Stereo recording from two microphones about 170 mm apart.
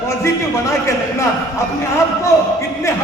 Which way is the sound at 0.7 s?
15° left (ahead or behind).